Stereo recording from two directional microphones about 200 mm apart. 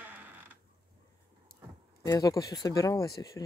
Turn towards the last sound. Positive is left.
turn(degrees=15)  # may be behind; listen again after turning